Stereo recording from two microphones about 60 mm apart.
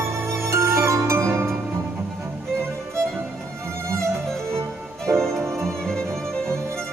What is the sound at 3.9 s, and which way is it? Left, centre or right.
Music, right.